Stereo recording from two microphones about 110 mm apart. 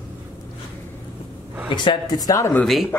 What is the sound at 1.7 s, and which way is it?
Speech, 45° left (ahead or behind).